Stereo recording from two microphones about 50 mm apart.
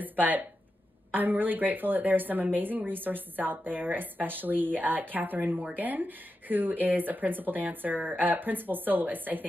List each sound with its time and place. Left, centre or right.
0.2 s a woman's voice: right